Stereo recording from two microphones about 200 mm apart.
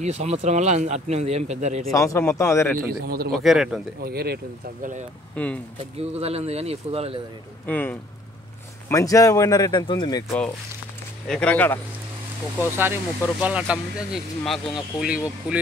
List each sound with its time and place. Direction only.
0.0 s speech: 35° right (ahead or behind)
1.9 s speech: 15° left (ahead or behind)
2.9 s a man's voice: 50° right (ahead or behind)
3.3 s speech: centre (ahead or behind)
4.0 s a man's voice: 50° right (ahead or behind)
5.3 s speech: 5° left (ahead or behind)
5.9 s speech: 30° right (ahead or behind)
7.6 s speech: 10° left (ahead or behind)
10.2 s speech: 5° left (ahead or behind)
12.7 s speech: 10° right (ahead or behind)